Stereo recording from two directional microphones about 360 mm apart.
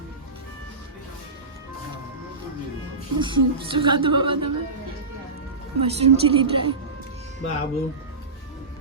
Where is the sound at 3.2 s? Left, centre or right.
Centre.